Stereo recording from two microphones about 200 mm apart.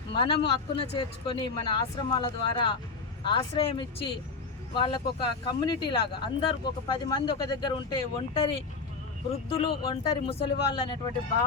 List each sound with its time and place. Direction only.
0.1 s speech: 25° left (ahead or behind)
9.5 s speech: 25° left (ahead or behind)